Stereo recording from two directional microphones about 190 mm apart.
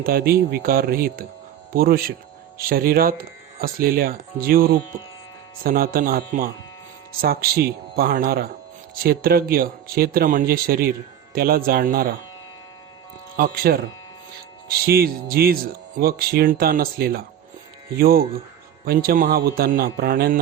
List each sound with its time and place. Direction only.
0.0 s speech: 50° right (ahead or behind)
13.3 s speech: 50° right (ahead or behind)